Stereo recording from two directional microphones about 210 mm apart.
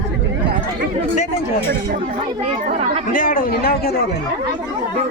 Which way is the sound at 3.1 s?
40° left (ahead or behind).